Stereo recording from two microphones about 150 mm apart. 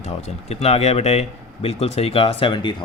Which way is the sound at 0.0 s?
45° left (ahead or behind).